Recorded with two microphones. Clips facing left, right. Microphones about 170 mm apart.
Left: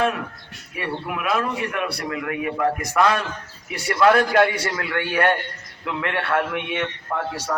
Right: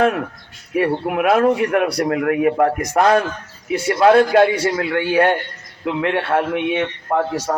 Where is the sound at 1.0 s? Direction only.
65° right (ahead or behind).